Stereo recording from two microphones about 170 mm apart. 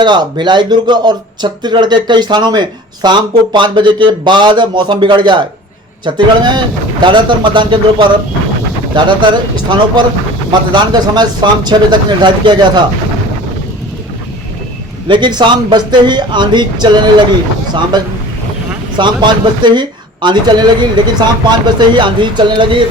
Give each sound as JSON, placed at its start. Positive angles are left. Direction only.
{"t": 0.0, "sound": "speech", "side_deg": -25}
{"t": 15.0, "sound": "speech", "side_deg": -25}